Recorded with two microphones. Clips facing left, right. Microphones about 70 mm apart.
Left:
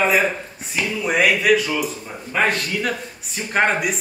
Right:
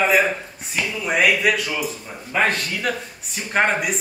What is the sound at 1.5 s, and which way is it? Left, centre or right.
Speech, centre.